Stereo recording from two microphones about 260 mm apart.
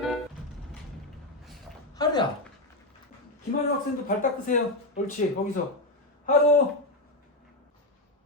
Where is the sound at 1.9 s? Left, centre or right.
Centre.